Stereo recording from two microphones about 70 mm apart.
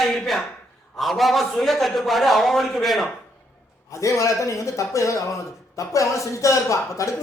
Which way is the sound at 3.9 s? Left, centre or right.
Left.